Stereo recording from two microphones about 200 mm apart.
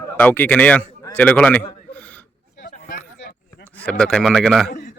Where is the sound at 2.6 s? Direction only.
40° left (ahead or behind).